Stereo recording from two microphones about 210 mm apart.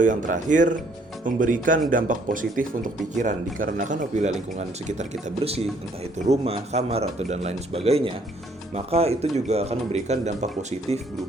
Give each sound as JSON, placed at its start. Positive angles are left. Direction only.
{"t": 0.0, "sound": "a man's voice", "side_deg": -40}